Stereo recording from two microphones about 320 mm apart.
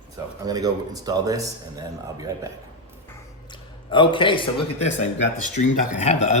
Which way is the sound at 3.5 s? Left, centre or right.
Centre.